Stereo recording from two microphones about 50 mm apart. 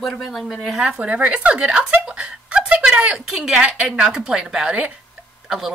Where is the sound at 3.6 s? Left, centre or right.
Right.